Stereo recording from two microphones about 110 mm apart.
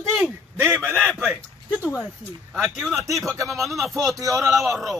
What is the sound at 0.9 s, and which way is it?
Speech, 5° left (ahead or behind).